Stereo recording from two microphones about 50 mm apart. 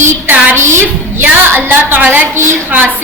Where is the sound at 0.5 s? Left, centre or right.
Right.